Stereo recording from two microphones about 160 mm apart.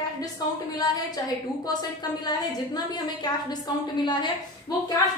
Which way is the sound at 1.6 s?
25° left (ahead or behind).